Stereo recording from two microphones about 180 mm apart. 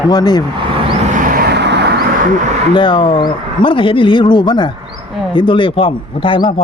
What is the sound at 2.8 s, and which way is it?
Speech, 25° left (ahead or behind).